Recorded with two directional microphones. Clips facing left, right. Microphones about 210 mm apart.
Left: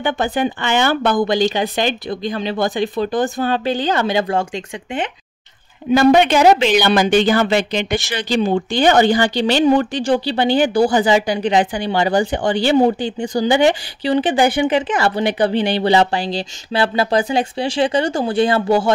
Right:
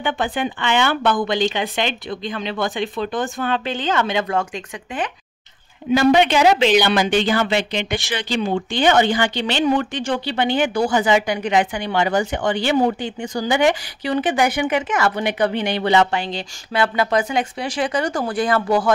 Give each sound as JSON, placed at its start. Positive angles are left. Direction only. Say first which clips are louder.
{"t": 0.0, "sound": "a woman's voice", "louder": "left 4 dB", "side_deg": 40}
{"t": 5.9, "sound": "a woman's voice", "louder": "left 3 dB", "side_deg": 45}